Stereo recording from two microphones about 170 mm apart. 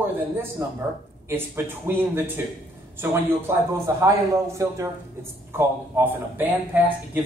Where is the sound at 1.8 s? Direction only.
15° right (ahead or behind).